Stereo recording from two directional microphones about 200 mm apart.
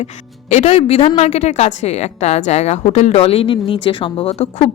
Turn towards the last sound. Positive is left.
turn(degrees=30)  # may be behind; listen again after turning